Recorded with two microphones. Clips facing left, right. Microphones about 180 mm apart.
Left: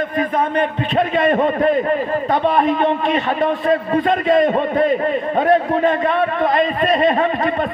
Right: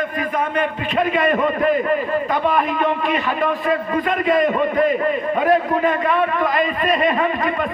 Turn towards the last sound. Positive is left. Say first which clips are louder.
# left 2 dB
turn(degrees=35)  # may be behind; listen again after turning